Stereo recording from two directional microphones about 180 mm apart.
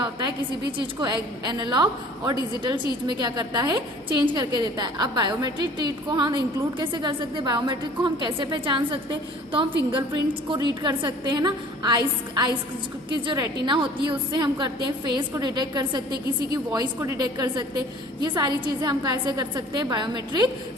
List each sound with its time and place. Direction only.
0.8 s a woman's voice: 25° right (ahead or behind)